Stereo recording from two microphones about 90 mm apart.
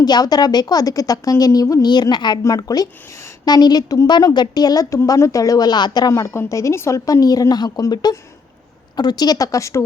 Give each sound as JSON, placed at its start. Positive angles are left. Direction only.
{"t": 0.0, "sound": "a woman's voice", "side_deg": 45}
{"t": 1.9, "sound": "a woman's voice", "side_deg": 55}
{"t": 2.6, "sound": "a woman's voice", "side_deg": 45}